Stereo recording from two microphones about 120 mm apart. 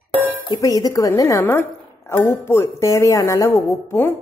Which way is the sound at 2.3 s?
20° left (ahead or behind).